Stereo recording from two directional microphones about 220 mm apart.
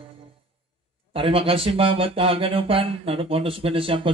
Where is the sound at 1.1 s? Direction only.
25° right (ahead or behind).